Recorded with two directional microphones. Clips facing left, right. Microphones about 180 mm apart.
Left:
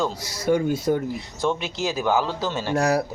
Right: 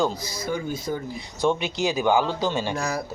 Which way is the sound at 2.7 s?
70° left (ahead or behind).